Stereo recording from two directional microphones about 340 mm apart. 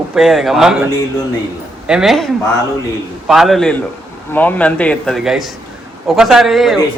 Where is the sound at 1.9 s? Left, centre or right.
Centre.